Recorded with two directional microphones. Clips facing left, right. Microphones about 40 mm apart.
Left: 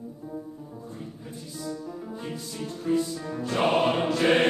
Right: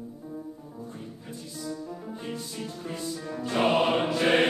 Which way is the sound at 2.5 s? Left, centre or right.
Centre.